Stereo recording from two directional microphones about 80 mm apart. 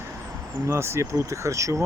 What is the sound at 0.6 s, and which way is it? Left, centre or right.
Speech, right.